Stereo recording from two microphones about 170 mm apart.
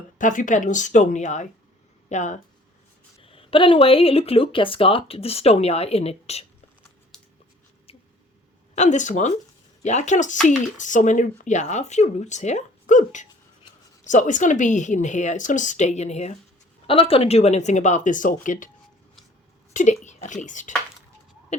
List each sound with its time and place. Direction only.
0.2 s speech: 50° left (ahead or behind)
3.2 s speech: 35° left (ahead or behind)
7.1 s a sound: 5° left (ahead or behind)
8.7 s speech: 45° left (ahead or behind)
19.7 s speech: 45° left (ahead or behind)